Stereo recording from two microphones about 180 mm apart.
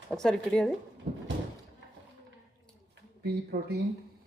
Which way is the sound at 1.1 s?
40° right (ahead or behind).